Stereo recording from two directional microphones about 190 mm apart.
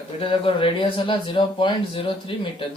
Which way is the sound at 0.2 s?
30° left (ahead or behind).